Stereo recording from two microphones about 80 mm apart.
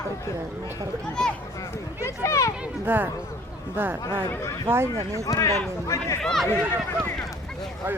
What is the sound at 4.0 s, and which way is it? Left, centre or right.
Speech, left.